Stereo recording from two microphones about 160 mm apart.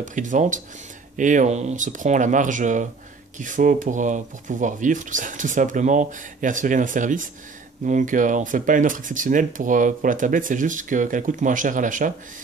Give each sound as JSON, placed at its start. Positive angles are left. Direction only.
{"t": 0.0, "sound": "speech", "side_deg": -50}